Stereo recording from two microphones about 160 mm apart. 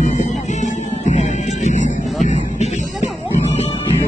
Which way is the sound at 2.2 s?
45° left (ahead or behind).